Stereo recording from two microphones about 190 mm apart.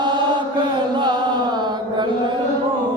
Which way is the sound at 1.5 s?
25° right (ahead or behind).